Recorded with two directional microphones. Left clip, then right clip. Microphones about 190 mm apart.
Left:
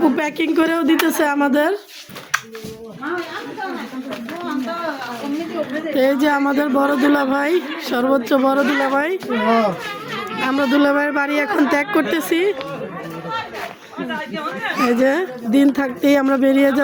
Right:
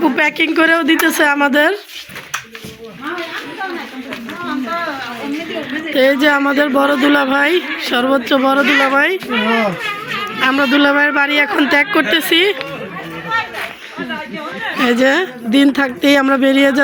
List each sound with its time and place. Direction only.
0.2 s speech: centre (ahead or behind)
5.9 s speech: 5° left (ahead or behind)
8.7 s speech: 15° right (ahead or behind)
9.0 s speech: centre (ahead or behind)
10.4 s speech: centre (ahead or behind)
14.8 s speech: 5° right (ahead or behind)